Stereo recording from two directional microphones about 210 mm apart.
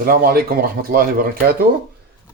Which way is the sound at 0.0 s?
45° right (ahead or behind).